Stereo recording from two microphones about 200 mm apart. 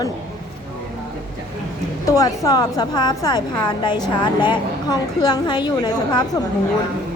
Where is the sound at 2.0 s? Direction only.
15° left (ahead or behind).